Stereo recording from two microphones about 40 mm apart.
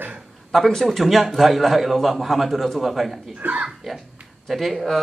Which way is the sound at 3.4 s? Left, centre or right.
Right.